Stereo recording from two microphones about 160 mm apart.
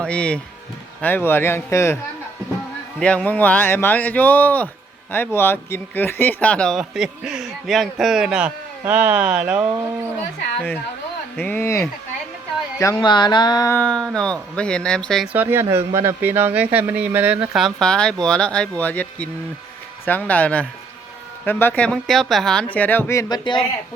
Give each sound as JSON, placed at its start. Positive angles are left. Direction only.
{"t": 0.0, "sound": "speech", "side_deg": 5}
{"t": 3.0, "sound": "a man's voice", "side_deg": 5}
{"t": 11.3, "sound": "speech", "side_deg": 10}
{"t": 12.8, "sound": "music", "side_deg": 25}
{"t": 13.7, "sound": "a man's voice", "side_deg": 5}
{"t": 15.3, "sound": "speech", "side_deg": -10}